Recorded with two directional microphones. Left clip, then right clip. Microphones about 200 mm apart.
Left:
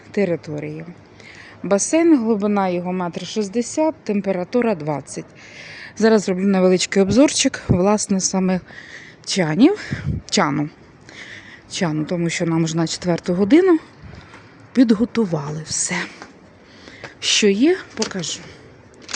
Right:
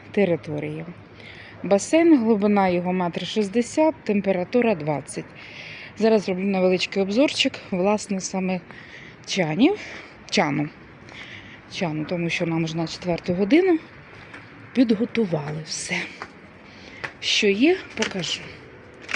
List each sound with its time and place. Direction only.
0.1 s a woman's voice: 10° left (ahead or behind)
6.0 s speech: 30° left (ahead or behind)
11.3 s a sound: 35° left (ahead or behind)
12.2 s speech: 25° left (ahead or behind)
17.2 s a woman's voice: 40° left (ahead or behind); by 18.4 s 15° left (ahead or behind)